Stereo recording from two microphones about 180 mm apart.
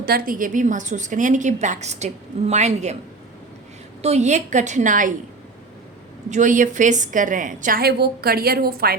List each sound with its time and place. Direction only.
0.0 s a woman's voice: 55° right (ahead or behind); by 3.0 s 40° right (ahead or behind)
4.0 s a woman's voice: 40° right (ahead or behind)
6.3 s a woman's voice: 45° right (ahead or behind)